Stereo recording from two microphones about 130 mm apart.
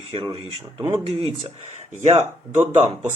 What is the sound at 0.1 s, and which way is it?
Speech, 40° right (ahead or behind).